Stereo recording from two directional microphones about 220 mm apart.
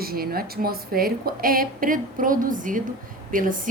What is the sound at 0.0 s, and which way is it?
A woman's voice, 45° right (ahead or behind).